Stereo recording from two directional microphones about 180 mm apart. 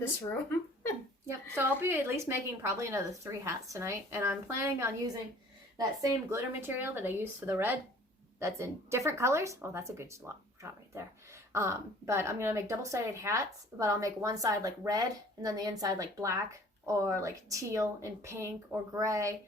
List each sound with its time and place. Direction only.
1.5 s a woman's voice: 15° right (ahead or behind)
11.5 s a woman's voice: 15° right (ahead or behind)